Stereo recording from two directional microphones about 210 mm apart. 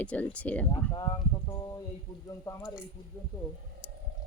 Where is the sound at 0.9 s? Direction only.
20° left (ahead or behind).